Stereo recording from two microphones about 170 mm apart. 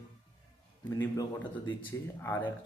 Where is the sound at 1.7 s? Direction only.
15° left (ahead or behind).